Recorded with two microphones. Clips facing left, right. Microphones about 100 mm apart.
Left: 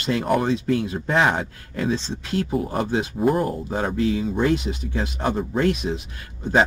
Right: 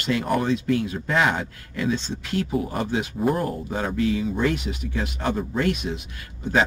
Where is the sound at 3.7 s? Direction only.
30° left (ahead or behind).